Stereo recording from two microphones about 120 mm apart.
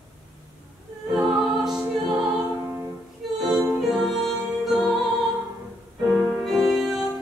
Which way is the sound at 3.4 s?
5° right (ahead or behind).